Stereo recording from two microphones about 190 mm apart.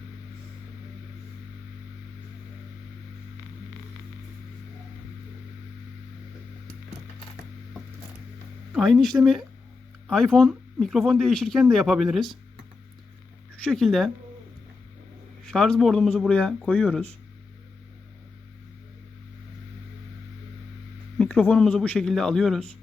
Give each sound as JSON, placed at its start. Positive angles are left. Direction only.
{"t": 8.7, "sound": "speech", "side_deg": 0}
{"t": 13.7, "sound": "speech", "side_deg": 0}
{"t": 15.4, "sound": "speech", "side_deg": 0}
{"t": 21.2, "sound": "speech", "side_deg": 5}